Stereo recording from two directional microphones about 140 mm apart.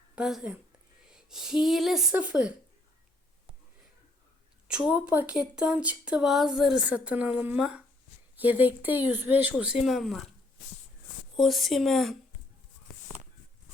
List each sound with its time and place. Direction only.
0.2 s speech: 5° right (ahead or behind)
4.7 s speech: 10° right (ahead or behind)
11.3 s speech: centre (ahead or behind)